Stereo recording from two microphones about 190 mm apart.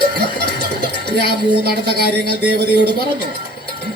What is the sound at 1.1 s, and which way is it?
A child's voice, 55° right (ahead or behind).